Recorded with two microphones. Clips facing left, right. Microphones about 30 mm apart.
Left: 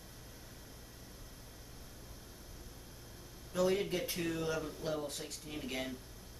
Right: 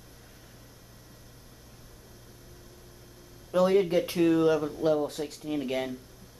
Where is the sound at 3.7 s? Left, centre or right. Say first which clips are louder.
Right 12 dB; centre.